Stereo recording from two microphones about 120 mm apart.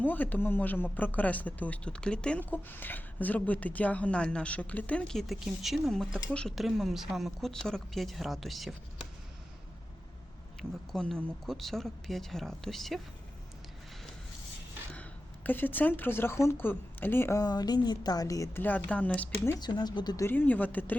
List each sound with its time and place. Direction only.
0.0 s speech: 15° left (ahead or behind)
10.6 s speech: 5° left (ahead or behind)
15.4 s speech: 15° left (ahead or behind)
17.4 s speech: 35° left (ahead or behind); by 19.5 s 10° left (ahead or behind)
19.5 s speech: 35° left (ahead or behind)
20.1 s speech: 20° left (ahead or behind)